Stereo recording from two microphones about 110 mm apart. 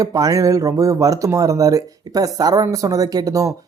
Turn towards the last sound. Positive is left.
turn(degrees=-30)  # may be behind; listen again after turning